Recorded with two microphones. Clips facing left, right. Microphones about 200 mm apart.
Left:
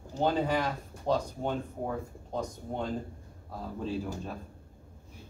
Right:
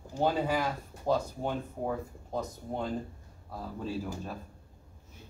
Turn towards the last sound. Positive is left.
turn(degrees=0)  # may be behind; listen again after turning